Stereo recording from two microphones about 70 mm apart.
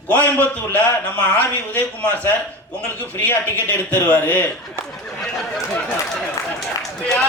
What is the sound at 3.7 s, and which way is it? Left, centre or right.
Speech, left.